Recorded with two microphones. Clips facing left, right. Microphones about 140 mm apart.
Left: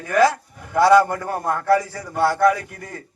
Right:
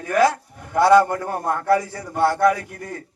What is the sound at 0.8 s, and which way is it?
A man's voice, 20° right (ahead or behind).